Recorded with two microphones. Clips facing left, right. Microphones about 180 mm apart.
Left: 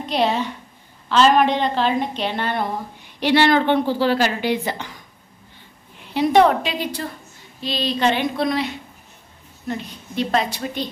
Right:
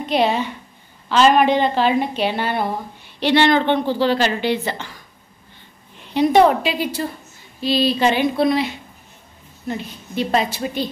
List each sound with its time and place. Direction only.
0.0 s a woman's voice: centre (ahead or behind)
3.2 s a woman's voice: 10° left (ahead or behind)
5.9 s a woman's voice: centre (ahead or behind)